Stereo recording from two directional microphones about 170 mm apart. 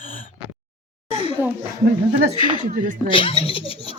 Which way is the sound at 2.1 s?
50° right (ahead or behind).